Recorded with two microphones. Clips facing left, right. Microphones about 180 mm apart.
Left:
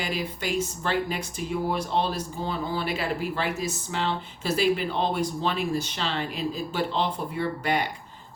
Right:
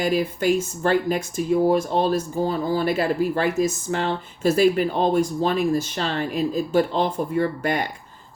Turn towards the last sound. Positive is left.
turn(degrees=-45)  # may be behind; listen again after turning